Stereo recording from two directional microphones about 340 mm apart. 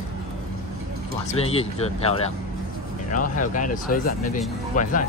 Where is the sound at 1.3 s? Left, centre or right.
Centre.